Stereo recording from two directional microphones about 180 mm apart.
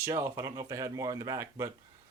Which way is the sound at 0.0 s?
15° right (ahead or behind).